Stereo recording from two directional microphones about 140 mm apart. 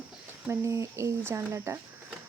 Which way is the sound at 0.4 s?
20° right (ahead or behind).